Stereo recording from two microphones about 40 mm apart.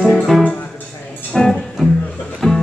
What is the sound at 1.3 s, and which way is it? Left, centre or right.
Music, centre.